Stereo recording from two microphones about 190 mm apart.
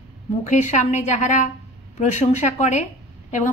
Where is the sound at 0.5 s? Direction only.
40° left (ahead or behind).